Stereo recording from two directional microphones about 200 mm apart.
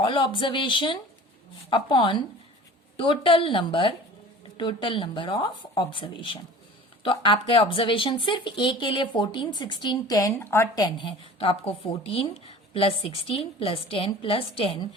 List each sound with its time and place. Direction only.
0.0 s speech: 25° left (ahead or behind)